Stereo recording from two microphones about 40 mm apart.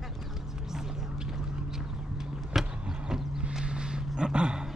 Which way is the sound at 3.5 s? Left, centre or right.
Centre.